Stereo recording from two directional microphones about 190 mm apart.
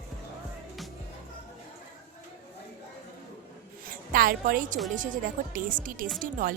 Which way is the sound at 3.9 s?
50° right (ahead or behind).